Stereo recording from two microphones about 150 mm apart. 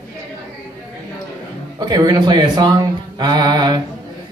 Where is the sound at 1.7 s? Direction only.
25° right (ahead or behind).